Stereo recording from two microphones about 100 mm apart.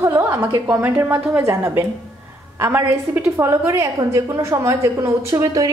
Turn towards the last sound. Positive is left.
turn(degrees=-35)  # may be behind; listen again after turning